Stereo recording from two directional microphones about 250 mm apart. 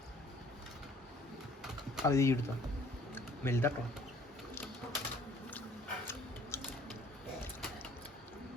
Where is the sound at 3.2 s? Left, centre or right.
Centre.